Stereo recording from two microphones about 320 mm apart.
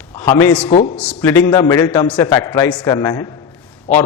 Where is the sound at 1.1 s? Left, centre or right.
Centre.